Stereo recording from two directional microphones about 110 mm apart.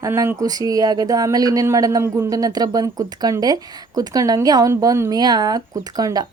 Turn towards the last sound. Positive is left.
turn(degrees=-35)  # may be behind; listen again after turning